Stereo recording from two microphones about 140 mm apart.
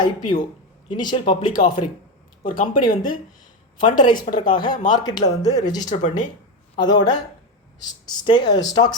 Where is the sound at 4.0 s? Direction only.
30° left (ahead or behind).